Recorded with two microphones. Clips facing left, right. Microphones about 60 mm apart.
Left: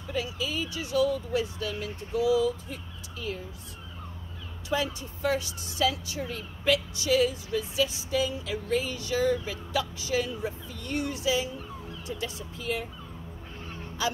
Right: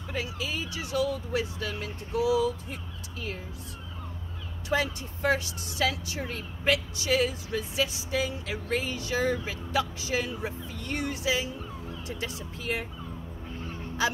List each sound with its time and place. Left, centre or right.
0.1 s speech: right
4.6 s speech: right
10.4 s speech: right